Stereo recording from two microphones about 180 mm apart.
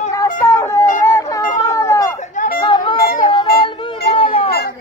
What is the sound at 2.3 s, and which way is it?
Chatter, 45° left (ahead or behind).